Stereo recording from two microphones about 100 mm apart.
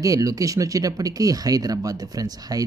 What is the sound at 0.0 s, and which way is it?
Speech, 35° right (ahead or behind).